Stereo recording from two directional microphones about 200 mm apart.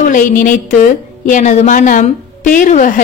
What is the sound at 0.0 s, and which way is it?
A woman's voice, 40° left (ahead or behind).